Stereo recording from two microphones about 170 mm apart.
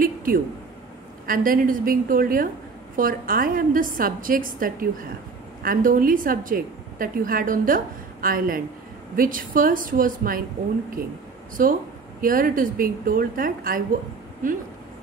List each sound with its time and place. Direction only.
0.0 s a sound: 60° right (ahead or behind)
1.2 s a woman's voice: 55° right (ahead or behind)
11.6 s a woman's voice: 55° right (ahead or behind)